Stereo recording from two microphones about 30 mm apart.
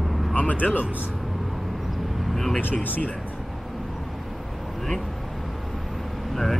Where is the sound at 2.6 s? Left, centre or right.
Left.